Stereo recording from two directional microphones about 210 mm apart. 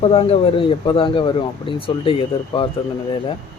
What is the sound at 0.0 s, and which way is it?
Speech, 25° left (ahead or behind).